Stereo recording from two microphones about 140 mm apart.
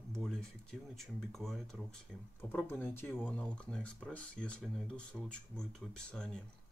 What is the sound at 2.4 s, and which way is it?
Speech, 15° left (ahead or behind).